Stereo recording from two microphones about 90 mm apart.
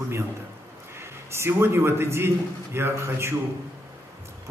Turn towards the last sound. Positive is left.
turn(degrees=-30)  # may be behind; listen again after turning